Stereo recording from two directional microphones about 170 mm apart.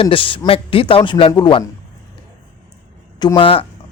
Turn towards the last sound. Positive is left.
turn(degrees=30)  # may be behind; listen again after turning